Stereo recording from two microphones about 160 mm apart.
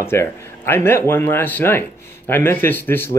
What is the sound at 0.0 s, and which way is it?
Speech, 15° left (ahead or behind).